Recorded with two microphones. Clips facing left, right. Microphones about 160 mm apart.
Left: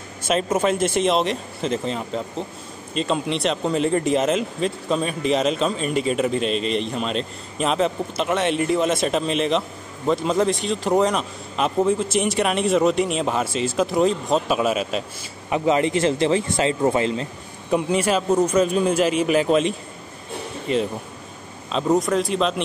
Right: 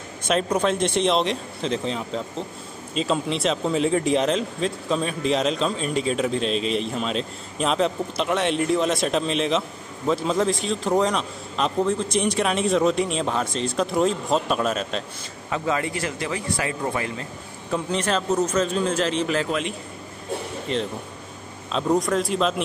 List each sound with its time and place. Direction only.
0.2 s speech: 5° left (ahead or behind)
15.5 s a man's voice: 20° left (ahead or behind)
20.7 s speech: 10° left (ahead or behind)